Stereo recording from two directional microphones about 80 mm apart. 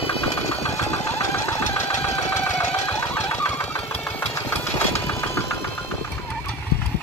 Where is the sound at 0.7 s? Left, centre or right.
Left.